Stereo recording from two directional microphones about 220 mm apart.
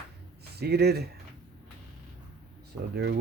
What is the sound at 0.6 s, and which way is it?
Speech, 45° right (ahead or behind).